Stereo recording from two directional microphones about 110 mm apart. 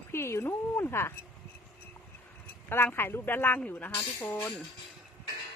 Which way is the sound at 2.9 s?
20° left (ahead or behind).